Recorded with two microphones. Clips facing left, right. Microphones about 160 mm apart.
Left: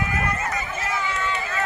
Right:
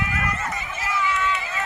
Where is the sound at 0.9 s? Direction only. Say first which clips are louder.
Right 4 dB; 35° left (ahead or behind).